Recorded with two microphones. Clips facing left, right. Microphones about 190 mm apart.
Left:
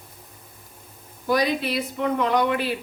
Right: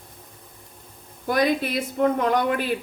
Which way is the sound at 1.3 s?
50° right (ahead or behind).